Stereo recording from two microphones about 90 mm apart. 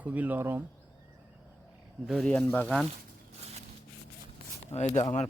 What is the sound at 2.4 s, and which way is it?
Speech, 20° left (ahead or behind).